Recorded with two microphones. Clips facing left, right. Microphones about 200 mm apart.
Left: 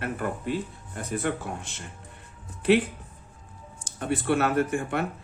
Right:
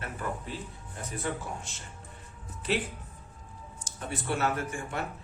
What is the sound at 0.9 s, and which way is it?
Speech, 65° left (ahead or behind).